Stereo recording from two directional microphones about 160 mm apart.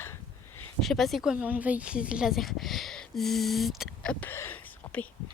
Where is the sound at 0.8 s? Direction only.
Centre (ahead or behind).